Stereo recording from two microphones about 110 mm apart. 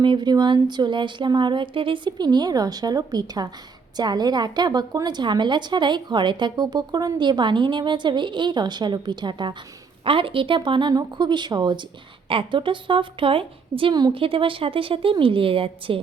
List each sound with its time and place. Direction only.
0.0 s a woman's voice: 45° right (ahead or behind)
10.0 s a woman's voice: 55° right (ahead or behind)